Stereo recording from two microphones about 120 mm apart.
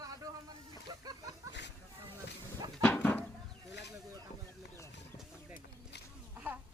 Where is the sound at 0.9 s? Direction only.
35° right (ahead or behind).